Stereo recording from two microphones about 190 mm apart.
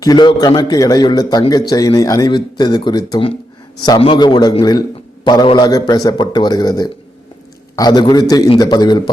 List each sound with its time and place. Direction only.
0.0 s a man's voice: 20° left (ahead or behind)